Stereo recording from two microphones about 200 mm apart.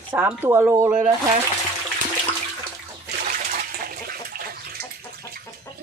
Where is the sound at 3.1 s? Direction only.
50° right (ahead or behind).